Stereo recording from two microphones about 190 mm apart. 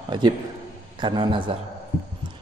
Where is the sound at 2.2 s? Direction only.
25° right (ahead or behind).